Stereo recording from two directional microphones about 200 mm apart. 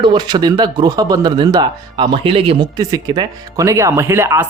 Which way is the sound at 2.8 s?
15° right (ahead or behind).